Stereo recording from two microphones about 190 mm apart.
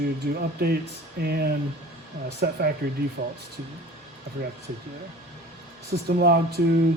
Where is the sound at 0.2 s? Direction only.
55° right (ahead or behind).